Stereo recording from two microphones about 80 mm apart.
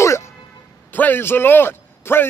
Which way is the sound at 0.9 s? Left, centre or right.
Left.